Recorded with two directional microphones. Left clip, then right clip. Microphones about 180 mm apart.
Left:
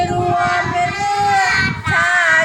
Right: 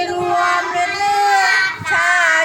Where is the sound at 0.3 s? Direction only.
5° right (ahead or behind).